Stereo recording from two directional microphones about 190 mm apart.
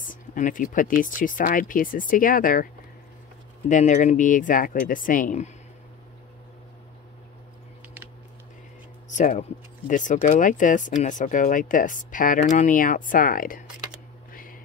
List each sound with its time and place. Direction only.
0.0 s speech: 45° left (ahead or behind)
9.1 s speech: 40° left (ahead or behind)
14.3 s a sound: 45° left (ahead or behind)